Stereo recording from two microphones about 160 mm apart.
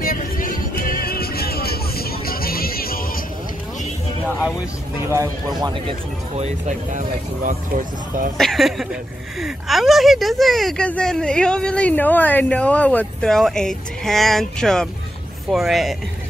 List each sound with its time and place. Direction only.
0.0 s music: 60° left (ahead or behind)
5.6 s speech: 30° right (ahead or behind)
6.3 s speech: 45° right (ahead or behind)
8.4 s speech: centre (ahead or behind)